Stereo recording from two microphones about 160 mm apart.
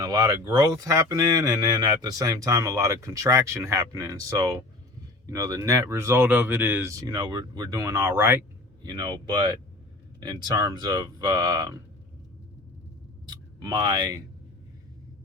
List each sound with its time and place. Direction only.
0.0 s speech: 20° right (ahead or behind)
8.8 s speech: 25° right (ahead or behind)
13.2 s speech: 25° right (ahead or behind)